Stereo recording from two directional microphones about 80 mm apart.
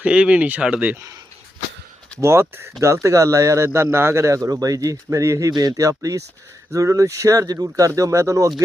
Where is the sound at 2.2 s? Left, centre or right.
Right.